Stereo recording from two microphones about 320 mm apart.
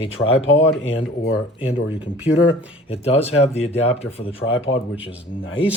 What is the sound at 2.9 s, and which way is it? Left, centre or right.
Speech, centre.